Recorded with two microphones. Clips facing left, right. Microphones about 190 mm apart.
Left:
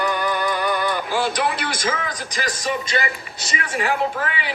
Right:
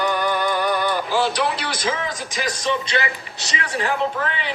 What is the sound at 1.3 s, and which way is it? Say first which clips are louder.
Speech: even; 45° left (ahead or behind).